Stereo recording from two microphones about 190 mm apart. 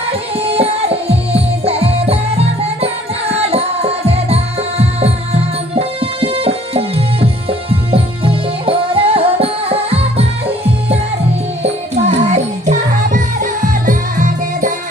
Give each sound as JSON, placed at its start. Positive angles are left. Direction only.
{"t": 0.3, "sound": "music", "side_deg": -30}